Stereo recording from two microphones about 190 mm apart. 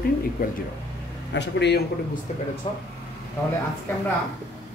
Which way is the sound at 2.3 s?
40° left (ahead or behind).